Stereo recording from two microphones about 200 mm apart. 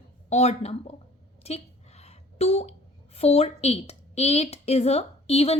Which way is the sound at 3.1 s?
30° left (ahead or behind).